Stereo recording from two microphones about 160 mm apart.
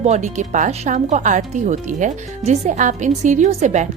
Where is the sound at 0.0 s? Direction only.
45° right (ahead or behind).